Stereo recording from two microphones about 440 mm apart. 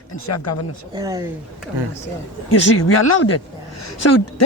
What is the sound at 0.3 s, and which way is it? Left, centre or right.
Speech, left.